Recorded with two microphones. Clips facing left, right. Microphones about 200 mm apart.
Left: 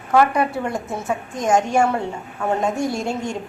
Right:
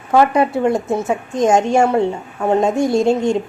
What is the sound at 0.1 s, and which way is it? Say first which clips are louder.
A woman's voice: right 4 dB; 25° right (ahead or behind).